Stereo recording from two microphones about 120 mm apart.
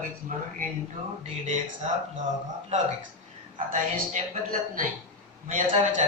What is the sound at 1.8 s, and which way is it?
Speech, 65° right (ahead or behind).